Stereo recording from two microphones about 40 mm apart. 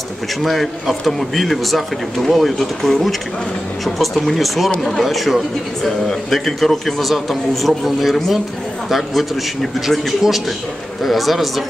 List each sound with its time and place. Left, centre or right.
0.4 s speech: centre